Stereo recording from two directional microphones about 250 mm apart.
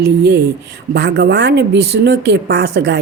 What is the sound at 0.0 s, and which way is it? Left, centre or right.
Speech, right.